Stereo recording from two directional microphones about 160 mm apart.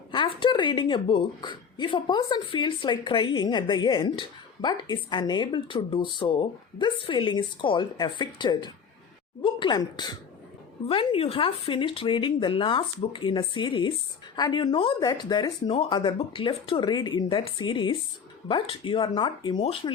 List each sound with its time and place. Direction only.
0.1 s a woman's voice: 30° left (ahead or behind)